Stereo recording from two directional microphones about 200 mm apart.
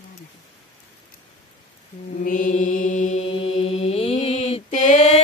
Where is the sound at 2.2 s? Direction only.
40° left (ahead or behind).